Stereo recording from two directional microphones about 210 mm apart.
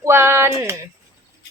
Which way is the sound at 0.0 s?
10° right (ahead or behind).